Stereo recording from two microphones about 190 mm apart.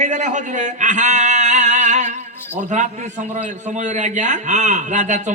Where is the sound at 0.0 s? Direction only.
40° right (ahead or behind).